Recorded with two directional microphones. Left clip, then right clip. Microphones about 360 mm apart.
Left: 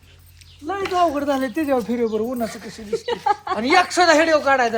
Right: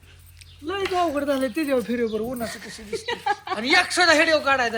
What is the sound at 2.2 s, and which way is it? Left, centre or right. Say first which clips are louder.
A woman's voice: left 4 dB; left.